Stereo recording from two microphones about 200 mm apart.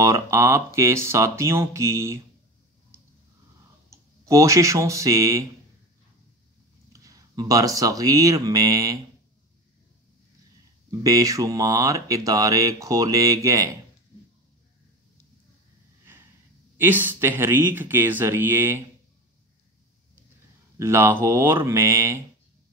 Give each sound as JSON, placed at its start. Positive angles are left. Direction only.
{"t": 0.0, "sound": "speech", "side_deg": -15}
{"t": 3.9, "sound": "speech", "side_deg": -15}
{"t": 6.9, "sound": "speech", "side_deg": -20}
{"t": 10.9, "sound": "speech", "side_deg": -15}
{"t": 16.7, "sound": "speech", "side_deg": -10}
{"t": 20.7, "sound": "speech", "side_deg": -15}